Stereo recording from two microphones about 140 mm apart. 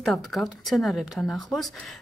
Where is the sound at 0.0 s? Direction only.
Centre (ahead or behind).